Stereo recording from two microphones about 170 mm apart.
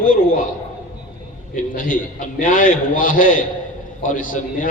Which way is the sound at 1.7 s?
55° left (ahead or behind).